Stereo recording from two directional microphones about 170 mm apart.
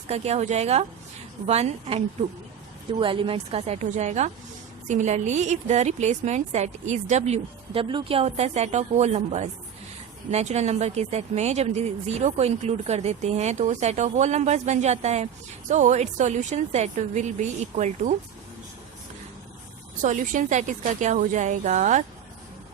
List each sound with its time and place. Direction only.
0.1 s speech: 40° right (ahead or behind)
3.0 s a woman's voice: 30° right (ahead or behind)
20.0 s a woman's voice: 50° right (ahead or behind)